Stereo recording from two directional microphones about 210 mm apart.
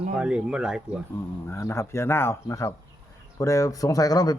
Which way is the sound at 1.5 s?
15° left (ahead or behind).